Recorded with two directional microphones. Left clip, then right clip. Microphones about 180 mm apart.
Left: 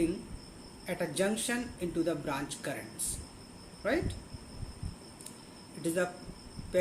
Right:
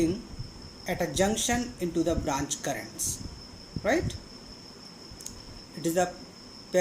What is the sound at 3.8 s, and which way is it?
Speech, 50° right (ahead or behind).